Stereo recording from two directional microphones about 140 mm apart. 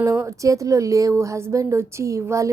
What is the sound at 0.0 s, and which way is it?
A woman's voice, 20° right (ahead or behind).